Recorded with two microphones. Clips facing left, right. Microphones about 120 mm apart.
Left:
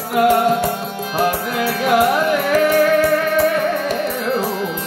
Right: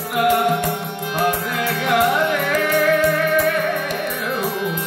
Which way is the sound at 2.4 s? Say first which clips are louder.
Left 4 dB; 20° left (ahead or behind).